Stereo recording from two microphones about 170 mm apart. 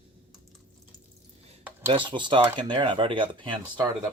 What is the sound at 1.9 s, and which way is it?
Speech, 30° right (ahead or behind).